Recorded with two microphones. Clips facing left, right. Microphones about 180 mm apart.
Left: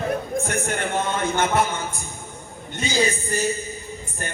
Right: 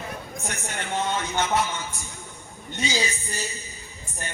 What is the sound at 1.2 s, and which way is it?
Speech, 50° left (ahead or behind).